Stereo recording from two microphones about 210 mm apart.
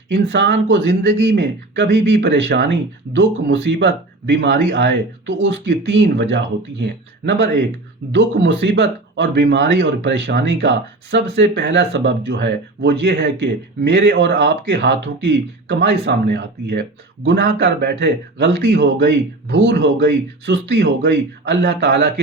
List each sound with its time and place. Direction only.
0.1 s speech: 55° right (ahead or behind)